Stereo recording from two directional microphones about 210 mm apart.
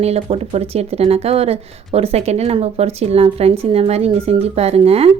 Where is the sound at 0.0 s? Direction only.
30° right (ahead or behind).